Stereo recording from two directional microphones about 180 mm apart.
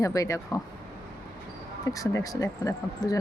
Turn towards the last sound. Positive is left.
turn(degrees=20)  # may be behind; listen again after turning